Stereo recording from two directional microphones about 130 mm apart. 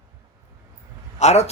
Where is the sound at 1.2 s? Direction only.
60° left (ahead or behind).